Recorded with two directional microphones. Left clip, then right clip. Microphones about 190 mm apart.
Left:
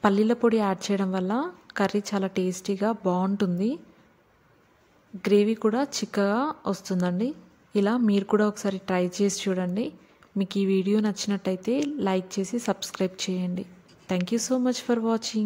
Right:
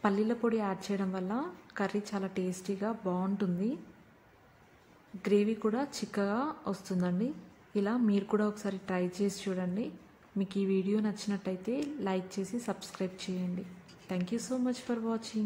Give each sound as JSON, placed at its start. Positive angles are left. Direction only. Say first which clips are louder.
{"t": 0.0, "sound": "a woman's voice", "louder": "left 9 dB", "side_deg": 30}
{"t": 5.2, "sound": "a woman's voice", "louder": "left 7 dB", "side_deg": 25}